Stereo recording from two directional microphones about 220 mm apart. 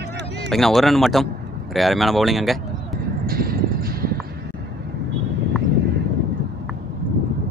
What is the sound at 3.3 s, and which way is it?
Music, 40° right (ahead or behind).